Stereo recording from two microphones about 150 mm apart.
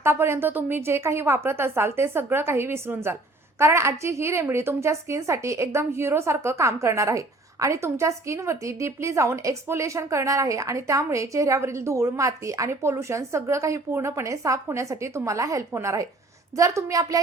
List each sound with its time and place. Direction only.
0.0 s a woman's voice: 15° right (ahead or behind)